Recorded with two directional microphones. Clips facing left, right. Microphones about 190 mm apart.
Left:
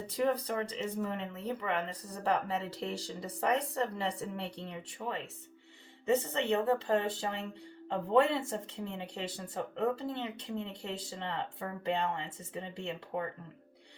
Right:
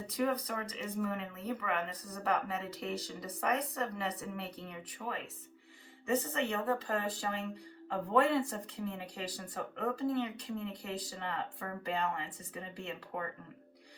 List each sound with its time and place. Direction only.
0.1 s speech: 30° left (ahead or behind)